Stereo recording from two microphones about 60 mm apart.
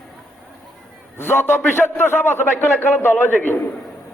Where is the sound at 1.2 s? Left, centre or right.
Left.